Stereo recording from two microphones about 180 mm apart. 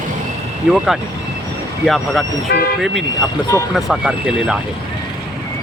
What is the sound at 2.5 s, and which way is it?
Speech, 60° left (ahead or behind).